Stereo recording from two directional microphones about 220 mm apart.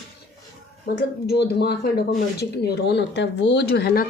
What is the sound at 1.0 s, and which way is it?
Speech, 50° left (ahead or behind).